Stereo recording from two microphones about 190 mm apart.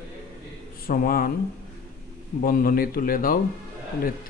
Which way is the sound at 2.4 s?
50° left (ahead or behind).